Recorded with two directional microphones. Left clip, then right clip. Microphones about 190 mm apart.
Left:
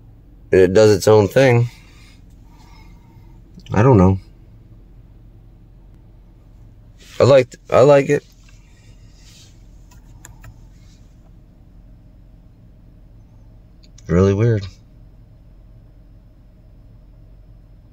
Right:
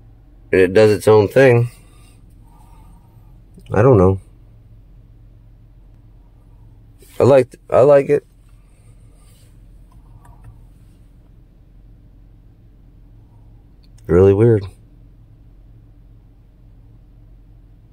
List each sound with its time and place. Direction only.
0.5 s speech: 25° left (ahead or behind); by 1.7 s centre (ahead or behind)
3.6 s speech: 10° right (ahead or behind)
7.2 s speech: 10° right (ahead or behind)
7.6 s speech: 15° left (ahead or behind)
14.0 s speech: 20° right (ahead or behind)